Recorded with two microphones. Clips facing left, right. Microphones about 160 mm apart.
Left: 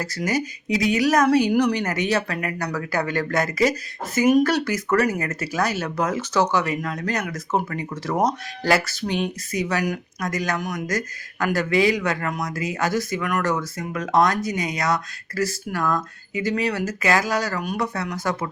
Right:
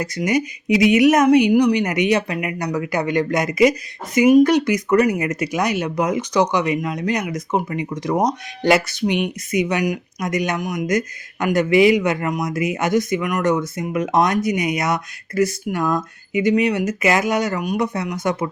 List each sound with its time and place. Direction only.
0.0 s a woman's voice: 20° right (ahead or behind)